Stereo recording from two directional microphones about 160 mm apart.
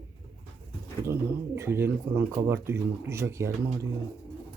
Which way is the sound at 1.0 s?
15° right (ahead or behind).